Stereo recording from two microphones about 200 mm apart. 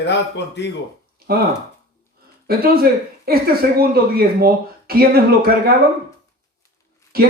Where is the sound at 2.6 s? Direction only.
50° right (ahead or behind).